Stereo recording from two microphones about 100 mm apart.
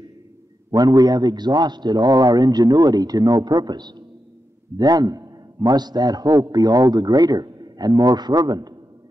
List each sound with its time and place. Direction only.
0.7 s a man's voice: 40° right (ahead or behind)